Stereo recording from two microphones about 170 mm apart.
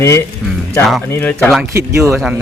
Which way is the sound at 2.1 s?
Centre (ahead or behind).